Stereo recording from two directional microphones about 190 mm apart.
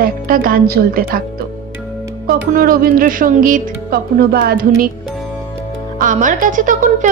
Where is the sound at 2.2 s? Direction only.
50° right (ahead or behind).